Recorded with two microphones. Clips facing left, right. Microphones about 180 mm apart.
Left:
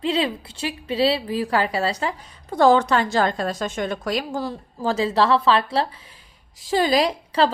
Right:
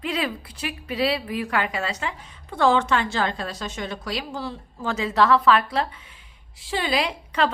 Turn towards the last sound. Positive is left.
turn(degrees=35)  # may be behind; listen again after turning